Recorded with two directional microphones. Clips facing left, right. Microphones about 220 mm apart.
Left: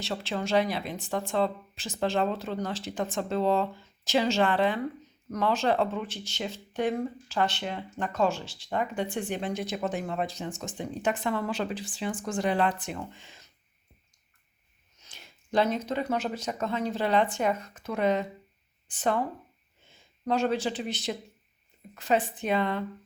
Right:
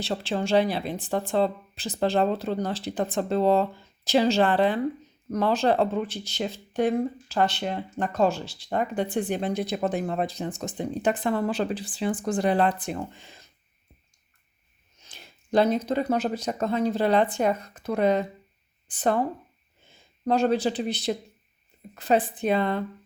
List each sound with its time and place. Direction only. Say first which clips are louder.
0.0 s speech: right 4 dB; 35° right (ahead or behind)
15.0 s speech: right 3 dB; 35° right (ahead or behind)
20.2 s speech: right 4 dB; 35° right (ahead or behind)